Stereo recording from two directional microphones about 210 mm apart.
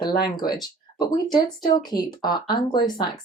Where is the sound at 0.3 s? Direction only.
20° left (ahead or behind).